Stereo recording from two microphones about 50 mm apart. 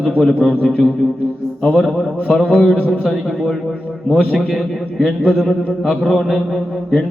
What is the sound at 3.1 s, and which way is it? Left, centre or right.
Mantra, centre.